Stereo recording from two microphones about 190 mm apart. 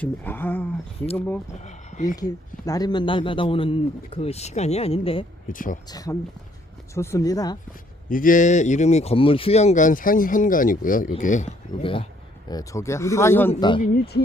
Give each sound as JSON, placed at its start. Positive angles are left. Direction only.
{"t": 0.0, "sound": "speech", "side_deg": 10}
{"t": 1.5, "sound": "a sound", "side_deg": 40}
{"t": 2.6, "sound": "speech", "side_deg": 20}
{"t": 5.5, "sound": "speech", "side_deg": 45}
{"t": 5.9, "sound": "speech", "side_deg": 20}
{"t": 8.1, "sound": "speech", "side_deg": 45}
{"t": 11.8, "sound": "speech", "side_deg": 25}
{"t": 12.5, "sound": "speech", "side_deg": 15}
{"t": 13.5, "sound": "speech", "side_deg": 25}
{"t": 13.8, "sound": "speech", "side_deg": 55}